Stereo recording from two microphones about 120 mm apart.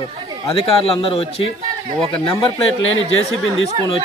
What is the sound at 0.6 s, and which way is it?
Speech, 50° left (ahead or behind).